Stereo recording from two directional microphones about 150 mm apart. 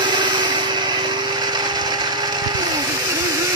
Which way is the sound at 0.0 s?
30° right (ahead or behind).